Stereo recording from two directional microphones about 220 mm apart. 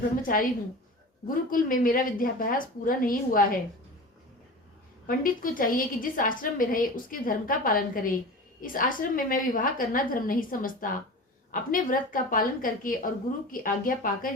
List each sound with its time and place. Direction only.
0.2 s a woman's voice: 40° left (ahead or behind)
5.0 s a woman's voice: 40° left (ahead or behind)